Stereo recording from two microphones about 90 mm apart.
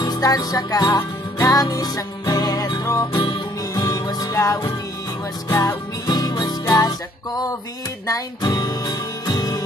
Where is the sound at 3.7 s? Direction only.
45° left (ahead or behind).